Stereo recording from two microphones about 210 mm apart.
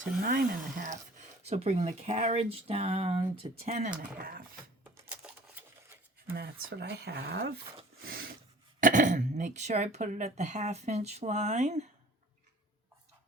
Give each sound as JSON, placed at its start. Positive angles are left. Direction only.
{"t": 0.0, "sound": "speech", "side_deg": -40}
{"t": 4.2, "sound": "speech", "side_deg": -45}
{"t": 4.8, "sound": "a sound", "side_deg": -5}
{"t": 6.3, "sound": "speech", "side_deg": -50}
{"t": 8.8, "sound": "speech", "side_deg": -35}